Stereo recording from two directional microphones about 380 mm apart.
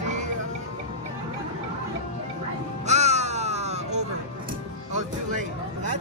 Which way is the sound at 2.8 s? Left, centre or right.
Centre.